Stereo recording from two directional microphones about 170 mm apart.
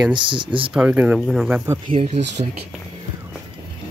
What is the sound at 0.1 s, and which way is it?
Speech, 30° right (ahead or behind).